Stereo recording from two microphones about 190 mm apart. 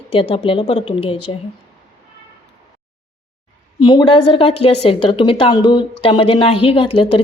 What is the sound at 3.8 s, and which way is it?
A woman's voice, 25° left (ahead or behind).